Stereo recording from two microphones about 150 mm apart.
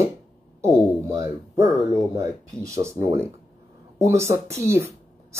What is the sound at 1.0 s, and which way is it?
Speech, 20° right (ahead or behind).